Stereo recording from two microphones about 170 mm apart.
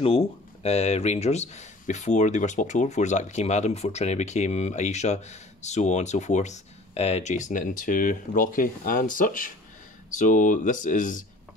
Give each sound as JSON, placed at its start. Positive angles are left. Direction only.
{"t": 0.0, "sound": "speech", "side_deg": 35}